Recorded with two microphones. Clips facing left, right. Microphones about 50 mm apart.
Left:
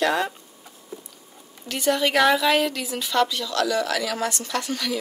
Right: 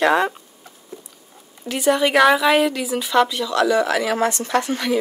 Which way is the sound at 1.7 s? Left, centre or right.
Centre.